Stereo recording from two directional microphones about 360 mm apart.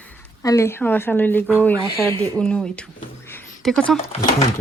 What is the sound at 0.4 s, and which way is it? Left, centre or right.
Speech, centre.